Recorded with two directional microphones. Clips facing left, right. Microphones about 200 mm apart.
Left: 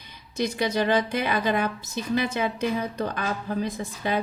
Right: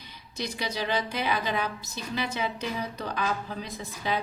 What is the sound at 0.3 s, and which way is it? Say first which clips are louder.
A woman's voice: left 8 dB; 50° left (ahead or behind).